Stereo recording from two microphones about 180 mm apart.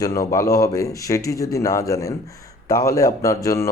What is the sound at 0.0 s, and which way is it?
A man's voice, 20° left (ahead or behind).